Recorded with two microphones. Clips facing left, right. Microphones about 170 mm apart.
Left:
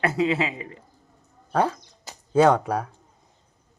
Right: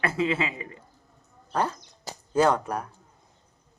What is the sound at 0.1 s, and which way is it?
Speech, 40° left (ahead or behind).